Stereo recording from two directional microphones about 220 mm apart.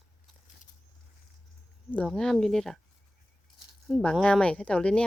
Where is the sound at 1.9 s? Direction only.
5° left (ahead or behind).